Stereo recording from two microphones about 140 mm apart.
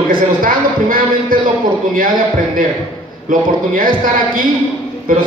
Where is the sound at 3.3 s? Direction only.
75° right (ahead or behind).